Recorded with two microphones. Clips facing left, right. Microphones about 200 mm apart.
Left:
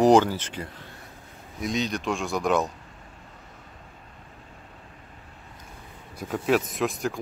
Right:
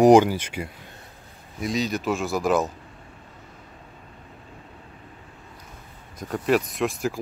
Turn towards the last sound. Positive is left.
turn(degrees=0)  # may be behind; listen again after turning